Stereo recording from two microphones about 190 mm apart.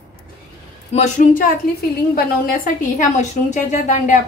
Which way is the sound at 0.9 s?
40° left (ahead or behind).